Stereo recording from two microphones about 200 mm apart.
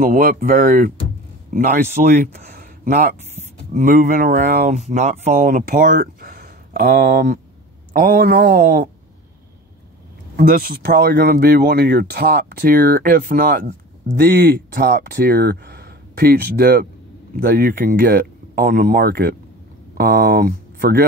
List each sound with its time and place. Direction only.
0.0 s speech: 45° right (ahead or behind)
10.3 s speech: 45° right (ahead or behind)
14.2 s speech: 55° right (ahead or behind)